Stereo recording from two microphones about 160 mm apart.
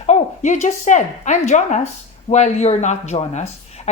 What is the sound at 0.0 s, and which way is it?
A woman's voice, 45° left (ahead or behind).